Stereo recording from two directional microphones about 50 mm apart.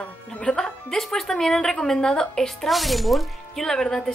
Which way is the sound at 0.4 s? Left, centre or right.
Centre.